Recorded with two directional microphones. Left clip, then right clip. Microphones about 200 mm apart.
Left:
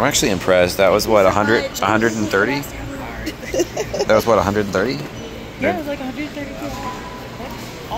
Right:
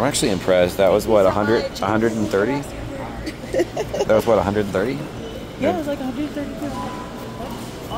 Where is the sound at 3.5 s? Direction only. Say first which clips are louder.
Left 1 dB; 40° left (ahead or behind).